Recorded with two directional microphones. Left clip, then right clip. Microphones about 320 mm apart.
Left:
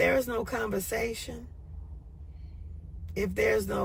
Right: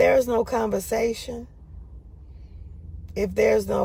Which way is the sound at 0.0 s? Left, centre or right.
Centre.